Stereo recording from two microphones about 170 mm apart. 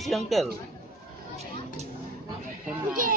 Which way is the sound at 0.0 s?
Centre (ahead or behind).